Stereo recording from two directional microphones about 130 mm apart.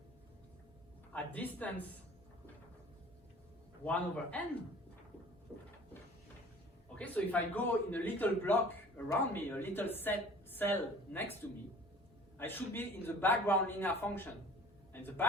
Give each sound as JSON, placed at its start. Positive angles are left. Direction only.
{"t": 1.1, "sound": "a woman's voice", "side_deg": 10}
{"t": 3.8, "sound": "a woman's voice", "side_deg": 10}
{"t": 7.0, "sound": "a woman's voice", "side_deg": 15}
{"t": 12.4, "sound": "a woman's voice", "side_deg": 15}